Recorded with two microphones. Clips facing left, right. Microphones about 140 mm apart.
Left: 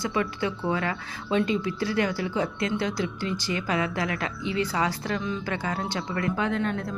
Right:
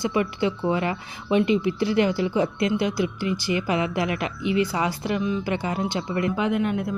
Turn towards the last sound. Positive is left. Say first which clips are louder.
# right 4 dB
turn(degrees=-10)  # may be behind; listen again after turning